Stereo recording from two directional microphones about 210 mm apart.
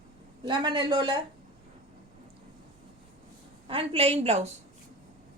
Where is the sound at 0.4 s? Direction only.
20° right (ahead or behind).